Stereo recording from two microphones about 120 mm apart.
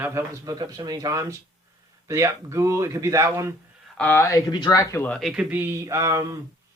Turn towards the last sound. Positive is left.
turn(degrees=-25)  # may be behind; listen again after turning